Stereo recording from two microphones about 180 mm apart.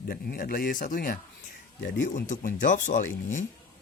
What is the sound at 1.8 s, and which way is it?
Speech, 90° left.